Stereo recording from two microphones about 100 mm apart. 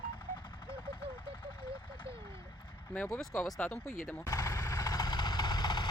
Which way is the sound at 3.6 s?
15° left (ahead or behind).